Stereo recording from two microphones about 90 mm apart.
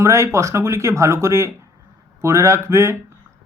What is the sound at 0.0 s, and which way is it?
Speech, 30° right (ahead or behind).